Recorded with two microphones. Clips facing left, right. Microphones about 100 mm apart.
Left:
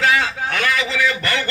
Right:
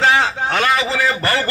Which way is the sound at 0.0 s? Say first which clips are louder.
Right 3 dB; 30° right (ahead or behind).